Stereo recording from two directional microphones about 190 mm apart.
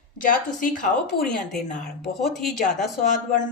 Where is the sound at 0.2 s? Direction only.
45° left (ahead or behind).